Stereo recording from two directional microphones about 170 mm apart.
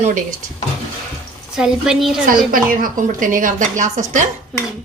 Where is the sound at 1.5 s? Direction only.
5° right (ahead or behind).